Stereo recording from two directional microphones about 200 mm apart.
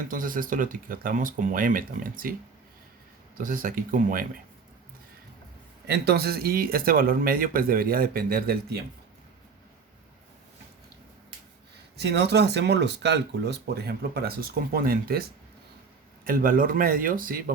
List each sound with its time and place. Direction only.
0.1 s speech: 45° right (ahead or behind)
3.3 s speech: 45° right (ahead or behind)
5.9 s speech: 50° right (ahead or behind)
11.9 s speech: 55° right (ahead or behind)
16.2 s speech: 45° right (ahead or behind)